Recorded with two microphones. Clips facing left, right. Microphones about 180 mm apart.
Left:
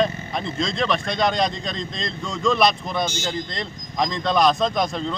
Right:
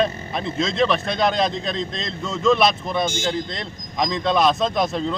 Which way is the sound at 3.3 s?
Centre (ahead or behind).